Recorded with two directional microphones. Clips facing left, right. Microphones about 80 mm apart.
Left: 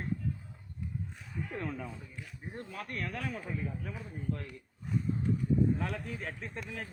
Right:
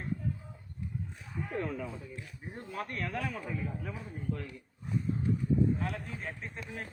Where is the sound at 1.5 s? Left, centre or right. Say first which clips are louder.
Right 4 dB; centre.